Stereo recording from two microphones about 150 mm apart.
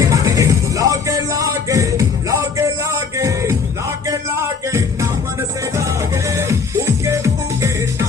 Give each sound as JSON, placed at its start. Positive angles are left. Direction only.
{"t": 0.0, "sound": "music", "side_deg": -20}